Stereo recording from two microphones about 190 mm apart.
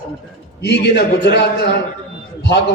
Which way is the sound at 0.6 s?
60° left (ahead or behind).